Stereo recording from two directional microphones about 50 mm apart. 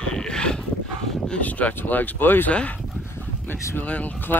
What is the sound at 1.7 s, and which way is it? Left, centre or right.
Speech, left.